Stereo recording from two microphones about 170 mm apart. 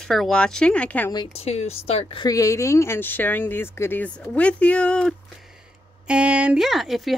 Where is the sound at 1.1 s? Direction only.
30° left (ahead or behind); by 5.2 s 5° left (ahead or behind).